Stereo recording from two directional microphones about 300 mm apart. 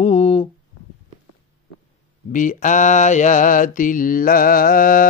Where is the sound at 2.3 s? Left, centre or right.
Left.